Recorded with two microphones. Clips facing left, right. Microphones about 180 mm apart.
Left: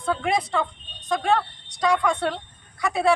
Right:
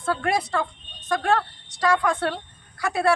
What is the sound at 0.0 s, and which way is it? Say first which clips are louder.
Speech: even; 5° right (ahead or behind).